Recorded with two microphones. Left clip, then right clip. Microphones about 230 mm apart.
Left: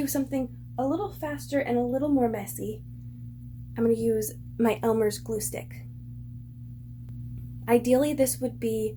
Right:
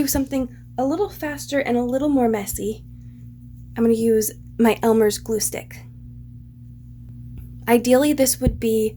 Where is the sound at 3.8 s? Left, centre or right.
Right.